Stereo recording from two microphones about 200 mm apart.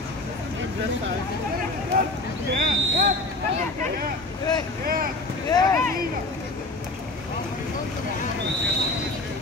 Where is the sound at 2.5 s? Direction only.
45° right (ahead or behind).